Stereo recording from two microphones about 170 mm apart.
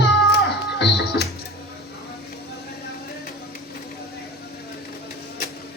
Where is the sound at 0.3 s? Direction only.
85° left.